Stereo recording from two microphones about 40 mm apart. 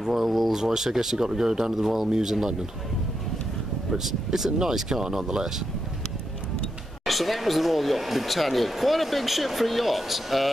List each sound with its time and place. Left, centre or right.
0.1 s speech: centre
2.0 s speech: centre
4.0 s speech: centre
7.1 s speech: centre